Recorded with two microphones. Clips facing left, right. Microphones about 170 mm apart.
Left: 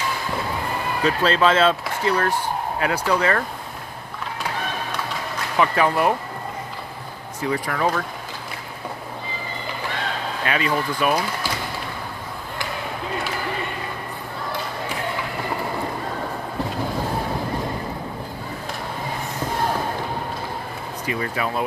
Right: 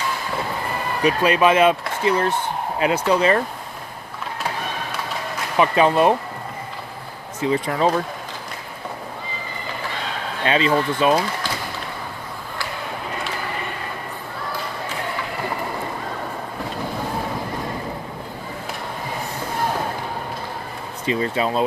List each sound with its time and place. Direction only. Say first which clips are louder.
1.0 s speech: right 2 dB; 15° right (ahead or behind)
5.5 s speech: right 3 dB; 20° right (ahead or behind)
7.4 s speech: right 3 dB; 20° right (ahead or behind)
10.4 s speech: right 5 dB; 25° right (ahead or behind)
21.1 s speech: right 5 dB; 25° right (ahead or behind)